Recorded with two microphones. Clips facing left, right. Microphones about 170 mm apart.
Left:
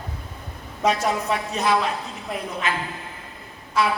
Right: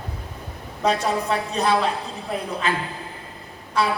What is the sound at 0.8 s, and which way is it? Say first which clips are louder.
Speech: even; 35° right (ahead or behind).